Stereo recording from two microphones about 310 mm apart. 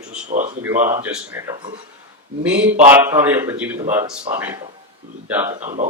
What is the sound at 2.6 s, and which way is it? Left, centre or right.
Speech, right.